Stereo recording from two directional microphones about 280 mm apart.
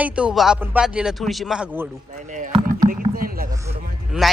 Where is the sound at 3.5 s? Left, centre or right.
Centre.